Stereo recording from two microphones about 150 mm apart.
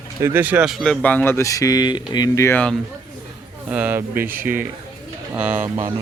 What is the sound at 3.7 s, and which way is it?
Speech, 10° right (ahead or behind).